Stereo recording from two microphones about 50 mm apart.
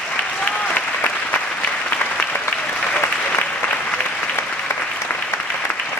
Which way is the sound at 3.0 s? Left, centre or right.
Left.